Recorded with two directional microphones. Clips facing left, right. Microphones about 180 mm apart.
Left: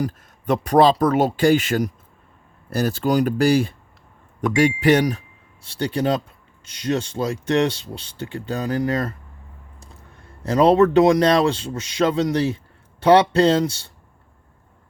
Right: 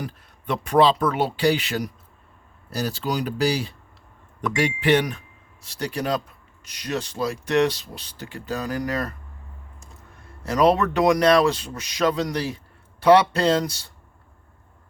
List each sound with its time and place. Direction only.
0.0 s speech: 40° left (ahead or behind)
10.4 s speech: 30° left (ahead or behind)